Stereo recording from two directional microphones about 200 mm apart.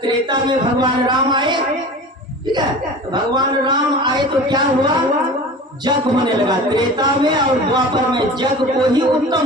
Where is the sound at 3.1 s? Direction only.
20° right (ahead or behind).